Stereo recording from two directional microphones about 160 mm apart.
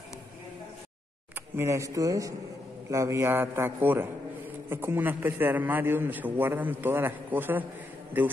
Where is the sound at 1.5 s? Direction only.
15° right (ahead or behind).